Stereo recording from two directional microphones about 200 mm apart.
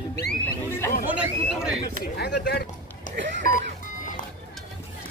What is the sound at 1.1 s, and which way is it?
Speech, 5° right (ahead or behind).